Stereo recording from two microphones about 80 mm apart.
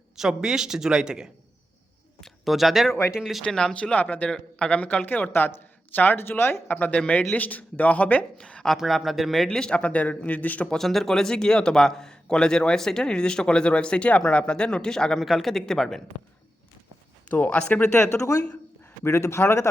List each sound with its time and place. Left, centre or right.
0.2 s a woman's voice: centre
3.4 s a man's voice: centre
10.8 s a man's voice: centre
17.3 s a man's voice: centre; by 19.6 s left